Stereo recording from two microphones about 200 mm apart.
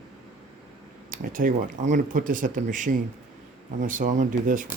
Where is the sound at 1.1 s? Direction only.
45° right (ahead or behind).